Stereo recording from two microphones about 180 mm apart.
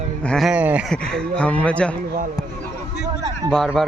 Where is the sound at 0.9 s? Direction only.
5° left (ahead or behind).